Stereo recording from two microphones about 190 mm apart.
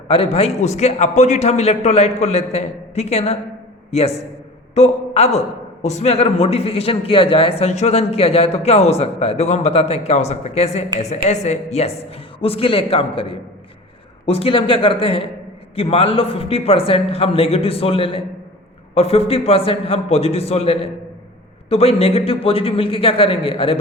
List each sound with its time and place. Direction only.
0.1 s a man's voice: 30° left (ahead or behind)